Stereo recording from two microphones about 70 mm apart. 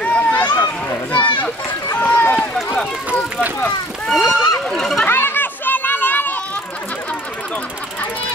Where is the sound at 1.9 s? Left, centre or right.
Left.